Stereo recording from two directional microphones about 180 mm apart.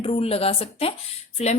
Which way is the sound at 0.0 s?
35° left (ahead or behind).